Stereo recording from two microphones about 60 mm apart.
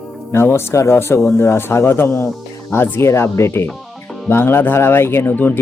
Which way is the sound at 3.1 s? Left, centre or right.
Left.